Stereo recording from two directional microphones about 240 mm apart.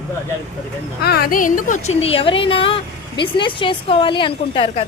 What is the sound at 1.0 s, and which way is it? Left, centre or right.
Speech, left.